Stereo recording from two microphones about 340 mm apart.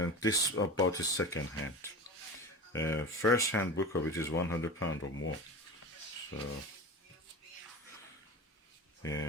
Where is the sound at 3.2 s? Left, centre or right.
Left.